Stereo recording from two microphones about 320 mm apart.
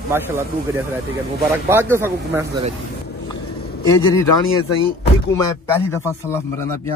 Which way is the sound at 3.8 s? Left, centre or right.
Centre.